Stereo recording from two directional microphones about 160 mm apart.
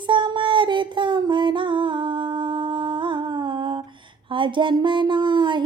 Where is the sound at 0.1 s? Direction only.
30° right (ahead or behind).